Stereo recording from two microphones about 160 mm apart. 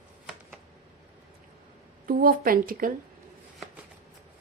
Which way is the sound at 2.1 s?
65° right (ahead or behind).